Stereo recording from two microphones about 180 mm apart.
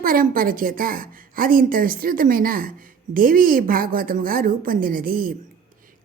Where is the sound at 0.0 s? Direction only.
50° right (ahead or behind).